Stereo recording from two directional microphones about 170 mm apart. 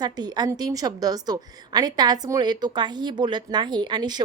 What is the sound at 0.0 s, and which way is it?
A woman's voice, 25° right (ahead or behind).